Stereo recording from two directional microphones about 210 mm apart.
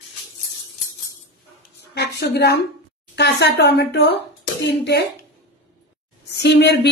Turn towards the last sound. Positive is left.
turn(degrees=55)  # may be behind; listen again after turning